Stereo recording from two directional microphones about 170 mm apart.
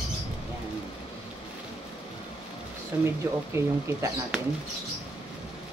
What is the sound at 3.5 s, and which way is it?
Speech, 15° right (ahead or behind).